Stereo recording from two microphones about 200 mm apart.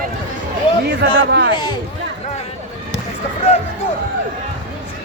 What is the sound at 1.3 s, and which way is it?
Speech, 55° right (ahead or behind).